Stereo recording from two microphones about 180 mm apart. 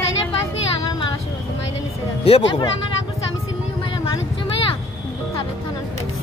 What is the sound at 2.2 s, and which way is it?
Speech, 35° left (ahead or behind).